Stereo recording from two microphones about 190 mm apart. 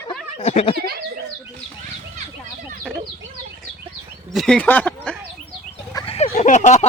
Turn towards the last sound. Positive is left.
turn(degrees=40)  # may be behind; listen again after turning